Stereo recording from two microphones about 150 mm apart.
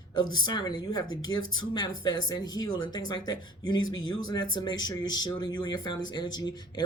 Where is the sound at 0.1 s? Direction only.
30° left (ahead or behind).